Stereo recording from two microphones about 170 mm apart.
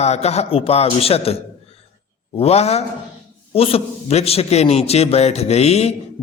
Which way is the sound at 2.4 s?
40° left (ahead or behind).